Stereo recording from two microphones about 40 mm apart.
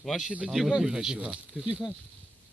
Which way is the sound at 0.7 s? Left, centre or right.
Centre.